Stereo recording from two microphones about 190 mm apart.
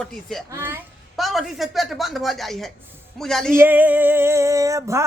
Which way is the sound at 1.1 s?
Centre (ahead or behind).